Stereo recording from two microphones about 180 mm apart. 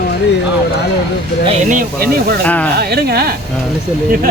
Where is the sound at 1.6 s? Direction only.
45° right (ahead or behind).